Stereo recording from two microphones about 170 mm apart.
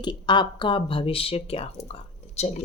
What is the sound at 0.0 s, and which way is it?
Speech, 25° left (ahead or behind).